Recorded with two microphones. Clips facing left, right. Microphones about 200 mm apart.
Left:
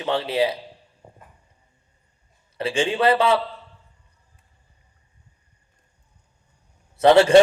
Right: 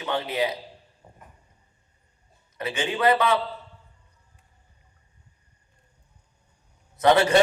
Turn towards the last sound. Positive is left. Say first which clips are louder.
# left 5 dB
turn(degrees=25)  # may be behind; listen again after turning